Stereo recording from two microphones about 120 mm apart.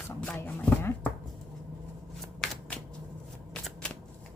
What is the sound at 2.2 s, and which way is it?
Shuffling cards, 5° left (ahead or behind).